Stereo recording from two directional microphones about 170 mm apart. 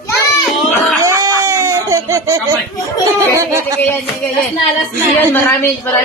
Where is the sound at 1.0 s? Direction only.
15° right (ahead or behind).